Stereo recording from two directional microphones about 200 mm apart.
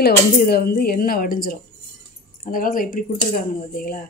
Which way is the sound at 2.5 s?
45° left (ahead or behind).